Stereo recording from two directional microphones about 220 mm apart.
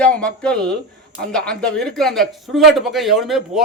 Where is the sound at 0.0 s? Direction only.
5° left (ahead or behind).